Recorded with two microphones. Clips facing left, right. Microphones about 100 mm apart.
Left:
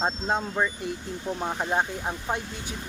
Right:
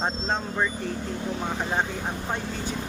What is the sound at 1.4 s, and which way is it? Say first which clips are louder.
Speech: left 2 dB; 10° left (ahead or behind).